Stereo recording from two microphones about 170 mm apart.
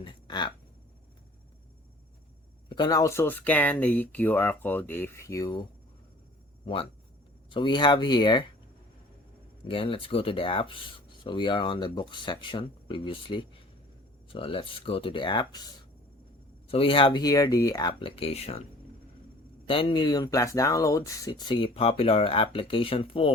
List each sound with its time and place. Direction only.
0.0 s a sound: 30° left (ahead or behind)
2.6 s speech: 25° left (ahead or behind)
7.5 s speech: 25° left (ahead or behind)
9.6 s speech: 30° left (ahead or behind)
18.2 s speech: 40° left (ahead or behind)
19.6 s speech: 30° left (ahead or behind)